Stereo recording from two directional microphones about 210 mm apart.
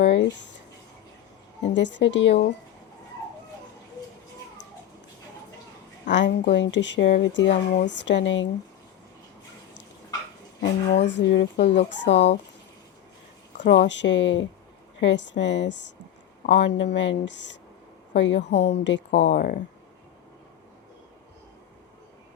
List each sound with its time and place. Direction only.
0.0 s a sound: 60° left (ahead or behind)
1.6 s speech: 55° left (ahead or behind)
6.1 s speech: 55° left (ahead or behind)
10.6 s speech: 55° left (ahead or behind)
13.7 s speech: 55° left (ahead or behind)